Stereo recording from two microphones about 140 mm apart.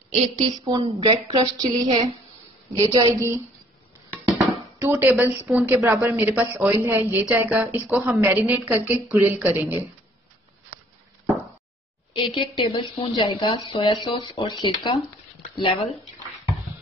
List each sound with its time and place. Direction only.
0.1 s a woman's voice: 50° right (ahead or behind); by 3.0 s 30° right (ahead or behind)
3.1 s a woman's voice: 20° right (ahead or behind)
4.3 s music: 20° right (ahead or behind)
5.1 s a woman's voice: 10° right (ahead or behind)
12.2 s speech: 40° left (ahead or behind)
16.4 s bouncing: centre (ahead or behind)